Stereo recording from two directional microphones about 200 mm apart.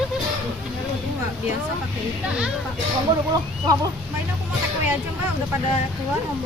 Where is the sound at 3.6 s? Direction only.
20° right (ahead or behind).